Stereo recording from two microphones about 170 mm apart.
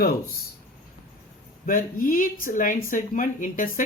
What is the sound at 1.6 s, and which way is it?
Speech, 55° left (ahead or behind).